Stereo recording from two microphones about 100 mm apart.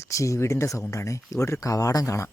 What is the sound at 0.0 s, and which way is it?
Speech, 30° left (ahead or behind).